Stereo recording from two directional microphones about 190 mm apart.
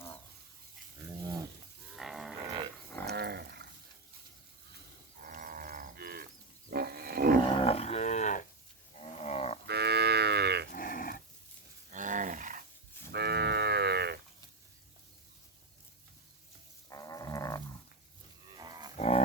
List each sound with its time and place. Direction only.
2.0 s livestock: centre (ahead or behind)
3.1 s dog: 60° right (ahead or behind)
5.2 s livestock: 45° right (ahead or behind)
6.7 s wild animals: 55° right (ahead or behind)
7.4 s livestock: 30° left (ahead or behind)
9.6 s livestock: 60° right (ahead or behind)
10.7 s dog: 45° left (ahead or behind)
11.9 s a sound: 40° right (ahead or behind)
13.1 s cattle: 60° right (ahead or behind)
16.9 s livestock: 20° left (ahead or behind)
18.5 s livestock: 20° right (ahead or behind)
18.9 s livestock: 35° left (ahead or behind)